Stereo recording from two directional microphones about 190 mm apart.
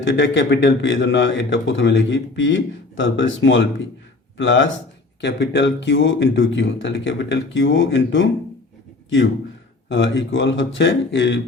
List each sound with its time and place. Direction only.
0.0 s a man's voice: 65° left (ahead or behind)
9.9 s a man's voice: 75° left (ahead or behind)